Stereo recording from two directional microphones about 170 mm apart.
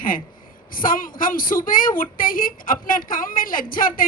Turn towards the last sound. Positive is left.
turn(degrees=55)  # may be behind; listen again after turning